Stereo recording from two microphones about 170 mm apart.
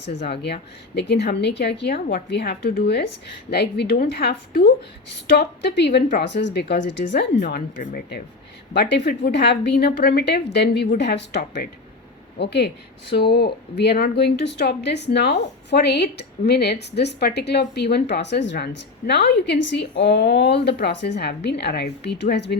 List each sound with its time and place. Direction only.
0.2 s speech: 75° left (ahead or behind); by 7.0 s 90° left
7.5 s speech: 65° left (ahead or behind)
8.7 s speech: 80° left